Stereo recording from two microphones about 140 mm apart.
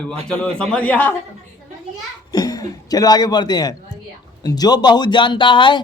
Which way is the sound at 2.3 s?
25° left (ahead or behind).